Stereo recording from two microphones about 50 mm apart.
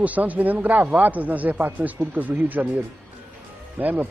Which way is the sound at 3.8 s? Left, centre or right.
Right.